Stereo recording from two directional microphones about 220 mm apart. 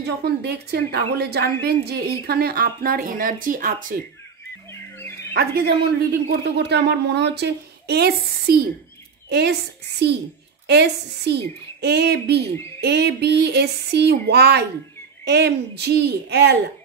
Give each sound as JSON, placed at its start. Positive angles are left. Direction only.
{"t": 0.0, "sound": "a woman's voice", "side_deg": -45}
{"t": 5.3, "sound": "a woman's voice", "side_deg": -45}